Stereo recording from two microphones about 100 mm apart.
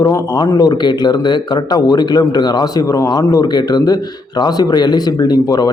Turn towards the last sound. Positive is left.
turn(degrees=40)  # may be behind; listen again after turning